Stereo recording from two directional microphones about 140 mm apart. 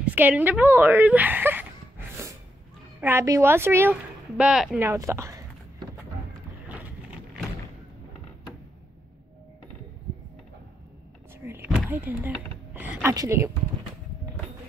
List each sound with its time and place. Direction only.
0.0 s a sound: 10° right (ahead or behind)
3.0 s a woman's voice: 15° right (ahead or behind)
4.4 s speech: 5° right (ahead or behind)
4.7 s speech: 20° right (ahead or behind)
11.4 s a sound: 15° right (ahead or behind)
13.1 s speech: 20° right (ahead or behind)